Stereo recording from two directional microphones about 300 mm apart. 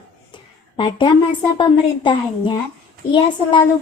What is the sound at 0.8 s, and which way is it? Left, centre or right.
A woman's voice, centre.